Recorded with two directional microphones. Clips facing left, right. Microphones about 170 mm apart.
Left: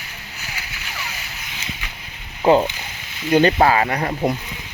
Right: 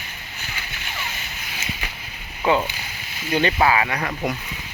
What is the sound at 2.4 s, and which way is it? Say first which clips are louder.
Speech: left 5 dB; 35° left (ahead or behind).